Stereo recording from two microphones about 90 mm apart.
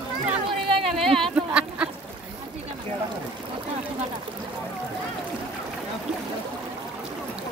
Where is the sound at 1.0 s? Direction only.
Centre (ahead or behind).